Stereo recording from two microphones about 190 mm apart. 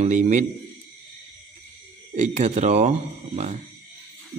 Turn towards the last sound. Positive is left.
turn(degrees=-35)  # may be behind; listen again after turning